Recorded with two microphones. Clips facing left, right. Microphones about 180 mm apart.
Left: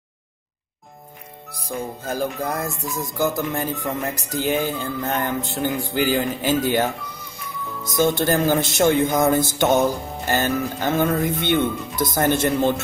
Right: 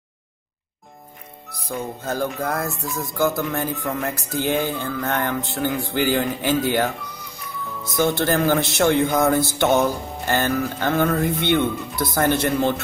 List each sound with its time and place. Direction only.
1.5 s speech: 15° left (ahead or behind)
8.0 s speech: 15° left (ahead or behind)